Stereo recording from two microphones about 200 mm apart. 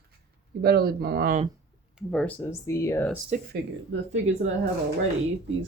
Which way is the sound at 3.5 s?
65° right (ahead or behind).